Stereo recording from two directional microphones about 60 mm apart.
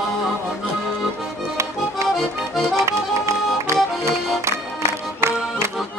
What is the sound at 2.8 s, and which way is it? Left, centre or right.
Accordion, right.